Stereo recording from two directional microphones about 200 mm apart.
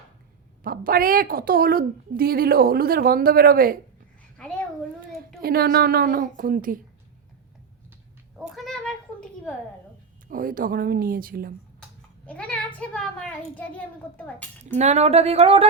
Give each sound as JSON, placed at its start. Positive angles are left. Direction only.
{"t": 0.6, "sound": "a woman's voice", "side_deg": -45}
{"t": 4.4, "sound": "a sound", "side_deg": 5}
{"t": 5.4, "sound": "a woman's voice", "side_deg": -50}
{"t": 8.5, "sound": "a sound", "side_deg": 0}
{"t": 10.2, "sound": "a woman's voice", "side_deg": -45}
{"t": 12.2, "sound": "a child's voice", "side_deg": 5}
{"t": 14.8, "sound": "speech", "side_deg": -35}